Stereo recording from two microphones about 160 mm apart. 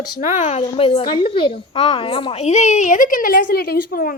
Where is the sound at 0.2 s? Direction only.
50° left (ahead or behind).